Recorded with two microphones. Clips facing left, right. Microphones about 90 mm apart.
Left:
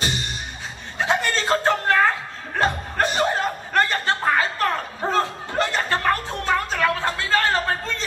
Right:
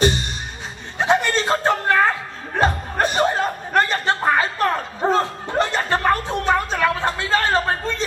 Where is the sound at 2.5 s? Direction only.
20° right (ahead or behind).